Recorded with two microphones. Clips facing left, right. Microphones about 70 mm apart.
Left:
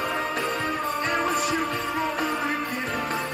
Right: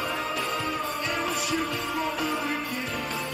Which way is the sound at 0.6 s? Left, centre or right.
Left.